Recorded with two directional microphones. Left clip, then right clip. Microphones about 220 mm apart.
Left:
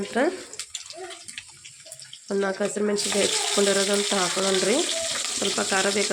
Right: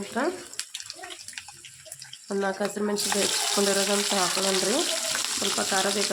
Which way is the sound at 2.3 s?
5° left (ahead or behind).